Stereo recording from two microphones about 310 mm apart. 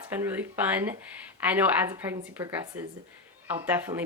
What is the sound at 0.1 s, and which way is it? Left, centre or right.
A woman's voice, centre.